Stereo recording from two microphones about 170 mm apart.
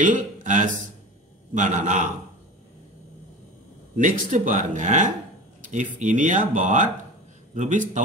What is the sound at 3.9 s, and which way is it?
Speech, 50° right (ahead or behind).